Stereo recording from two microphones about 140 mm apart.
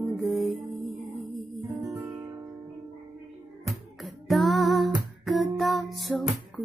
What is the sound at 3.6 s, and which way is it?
Music, centre (ahead or behind).